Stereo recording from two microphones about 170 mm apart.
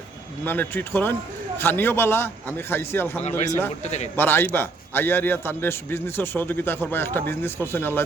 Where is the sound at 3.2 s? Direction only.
40° left (ahead or behind).